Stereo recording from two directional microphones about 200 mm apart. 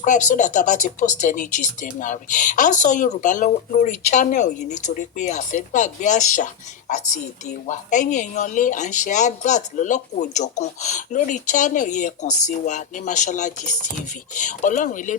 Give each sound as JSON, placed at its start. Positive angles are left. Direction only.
{"t": 0.0, "sound": "speech", "side_deg": 40}